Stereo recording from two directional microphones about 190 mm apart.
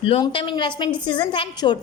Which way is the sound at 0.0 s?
30° left (ahead or behind).